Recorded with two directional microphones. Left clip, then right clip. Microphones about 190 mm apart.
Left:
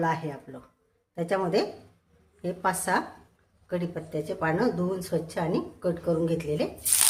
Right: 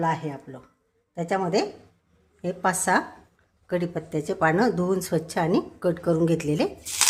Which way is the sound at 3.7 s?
50° right (ahead or behind).